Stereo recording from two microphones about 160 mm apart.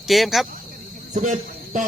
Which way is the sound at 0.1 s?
Centre (ahead or behind).